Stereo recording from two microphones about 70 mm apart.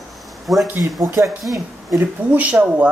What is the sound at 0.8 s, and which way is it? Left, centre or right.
Speech, right.